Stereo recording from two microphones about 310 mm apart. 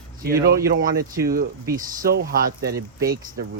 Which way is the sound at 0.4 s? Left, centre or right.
Right.